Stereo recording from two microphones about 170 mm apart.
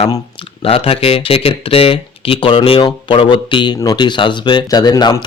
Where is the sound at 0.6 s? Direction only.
35° left (ahead or behind).